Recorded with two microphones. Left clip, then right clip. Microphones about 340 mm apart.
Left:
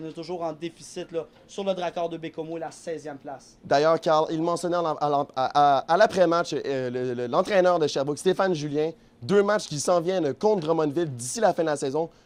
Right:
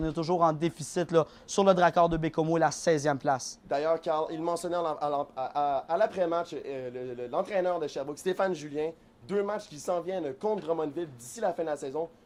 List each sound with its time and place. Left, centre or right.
0.0 s speech: right
3.7 s speech: left